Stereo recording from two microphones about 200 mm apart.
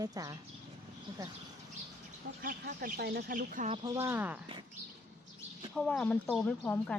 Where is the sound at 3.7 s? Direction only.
15° right (ahead or behind).